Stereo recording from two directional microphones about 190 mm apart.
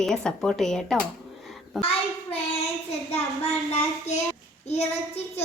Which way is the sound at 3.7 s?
35° left (ahead or behind).